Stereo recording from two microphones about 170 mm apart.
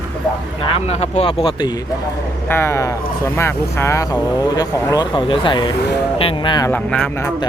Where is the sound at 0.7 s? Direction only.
40° left (ahead or behind).